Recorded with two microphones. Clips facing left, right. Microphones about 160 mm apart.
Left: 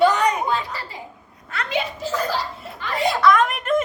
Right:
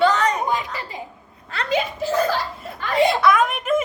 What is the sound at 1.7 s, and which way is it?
A child's voice, 50° right (ahead or behind).